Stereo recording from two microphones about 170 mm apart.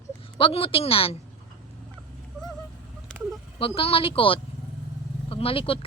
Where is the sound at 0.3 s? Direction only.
30° left (ahead or behind).